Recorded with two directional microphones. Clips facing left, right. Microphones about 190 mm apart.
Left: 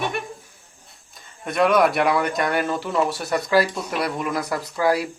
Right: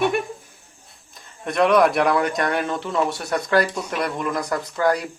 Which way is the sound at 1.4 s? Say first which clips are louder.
Right 1 dB; centre (ahead or behind).